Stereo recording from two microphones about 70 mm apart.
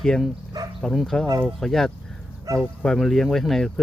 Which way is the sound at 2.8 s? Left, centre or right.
Centre.